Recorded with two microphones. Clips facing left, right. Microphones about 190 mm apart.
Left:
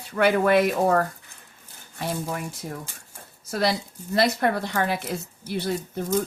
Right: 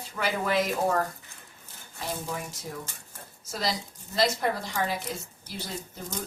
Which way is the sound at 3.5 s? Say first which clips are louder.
Left 7 dB; 60° left (ahead or behind).